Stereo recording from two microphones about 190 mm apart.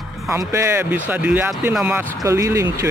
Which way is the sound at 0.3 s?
15° right (ahead or behind).